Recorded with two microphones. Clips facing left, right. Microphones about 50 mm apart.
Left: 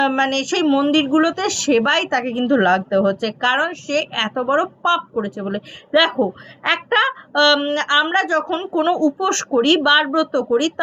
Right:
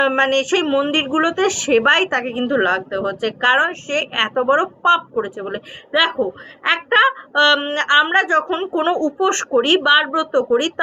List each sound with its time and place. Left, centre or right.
0.0 s speech: right
3.6 s speech: right
5.9 s speech: centre
10.3 s speech: right